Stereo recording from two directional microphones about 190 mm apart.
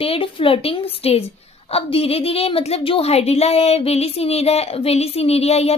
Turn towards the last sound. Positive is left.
turn(degrees=35)  # may be behind; listen again after turning